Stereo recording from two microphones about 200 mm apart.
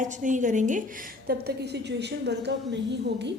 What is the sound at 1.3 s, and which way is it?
A woman's voice, 55° right (ahead or behind).